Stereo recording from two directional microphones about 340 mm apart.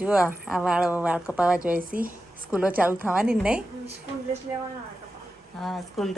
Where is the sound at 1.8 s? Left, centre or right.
Right.